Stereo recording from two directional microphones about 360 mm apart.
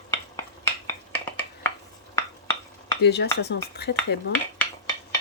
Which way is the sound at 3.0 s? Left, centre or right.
Left.